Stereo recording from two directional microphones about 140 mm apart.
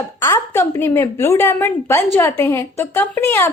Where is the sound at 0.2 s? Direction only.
20° left (ahead or behind).